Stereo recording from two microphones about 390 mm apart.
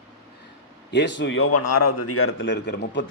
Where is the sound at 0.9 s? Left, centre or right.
Left.